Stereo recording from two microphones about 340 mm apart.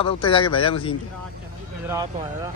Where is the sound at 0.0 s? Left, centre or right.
Centre.